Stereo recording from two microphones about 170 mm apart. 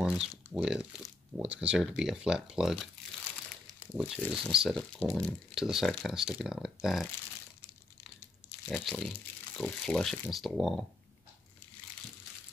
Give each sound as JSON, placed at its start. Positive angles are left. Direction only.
{"t": 0.0, "sound": "speech", "side_deg": -5}
{"t": 3.9, "sound": "speech", "side_deg": -5}
{"t": 8.6, "sound": "speech", "side_deg": 5}